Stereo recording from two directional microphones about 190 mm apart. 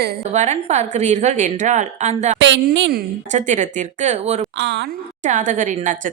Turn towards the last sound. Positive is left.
turn(degrees=-40)  # may be behind; listen again after turning